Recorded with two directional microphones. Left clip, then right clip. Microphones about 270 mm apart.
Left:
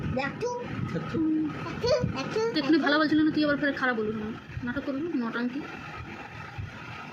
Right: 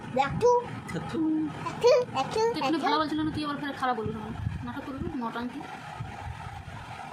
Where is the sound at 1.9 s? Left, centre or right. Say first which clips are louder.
Right 5 dB; centre.